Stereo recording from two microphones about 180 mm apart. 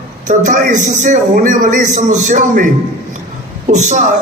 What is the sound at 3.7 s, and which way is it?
Speech, 40° right (ahead or behind).